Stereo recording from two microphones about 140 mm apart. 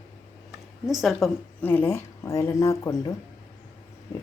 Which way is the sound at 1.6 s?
15° left (ahead or behind).